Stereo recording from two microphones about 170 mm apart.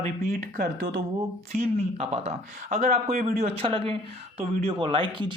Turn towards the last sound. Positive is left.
turn(degrees=-30)  # may be behind; listen again after turning